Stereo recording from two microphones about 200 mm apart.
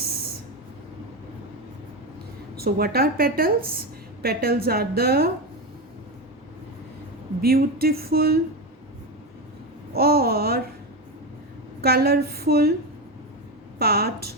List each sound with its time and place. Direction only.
2.6 s a woman's voice: 50° right (ahead or behind)
7.4 s a woman's voice: 50° right (ahead or behind)
9.9 s babbling: 50° right (ahead or behind)
11.8 s a woman's voice: 50° right (ahead or behind)
13.7 s a woman's voice: 50° right (ahead or behind)